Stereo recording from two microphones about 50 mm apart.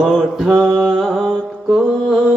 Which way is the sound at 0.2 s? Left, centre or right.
Centre.